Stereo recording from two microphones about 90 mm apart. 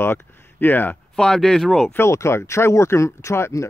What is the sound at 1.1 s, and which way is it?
Speech, 5° left (ahead or behind).